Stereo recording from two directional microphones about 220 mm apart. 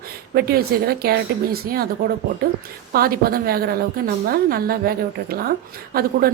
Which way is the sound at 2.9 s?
40° right (ahead or behind).